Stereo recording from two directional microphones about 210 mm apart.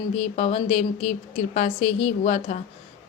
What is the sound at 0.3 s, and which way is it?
A woman's voice, 30° left (ahead or behind).